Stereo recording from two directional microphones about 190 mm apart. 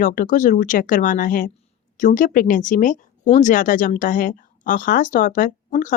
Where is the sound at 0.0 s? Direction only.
45° left (ahead or behind).